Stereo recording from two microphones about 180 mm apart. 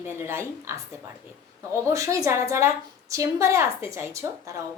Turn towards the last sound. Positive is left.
turn(degrees=-15)  # may be behind; listen again after turning